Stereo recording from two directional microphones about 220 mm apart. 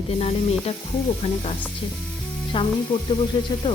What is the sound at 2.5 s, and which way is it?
Speech, 20° left (ahead or behind).